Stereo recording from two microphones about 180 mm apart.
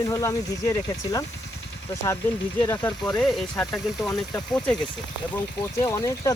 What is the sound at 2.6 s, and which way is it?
Speech, 15° left (ahead or behind).